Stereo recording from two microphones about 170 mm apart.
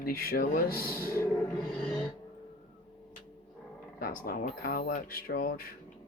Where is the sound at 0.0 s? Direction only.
60° left (ahead or behind).